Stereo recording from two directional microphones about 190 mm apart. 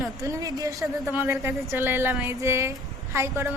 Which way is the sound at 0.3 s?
20° right (ahead or behind).